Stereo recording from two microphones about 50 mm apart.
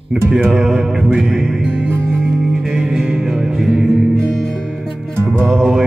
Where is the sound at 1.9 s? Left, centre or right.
Right.